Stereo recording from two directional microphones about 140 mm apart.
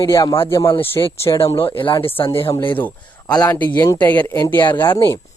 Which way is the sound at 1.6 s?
35° left (ahead or behind).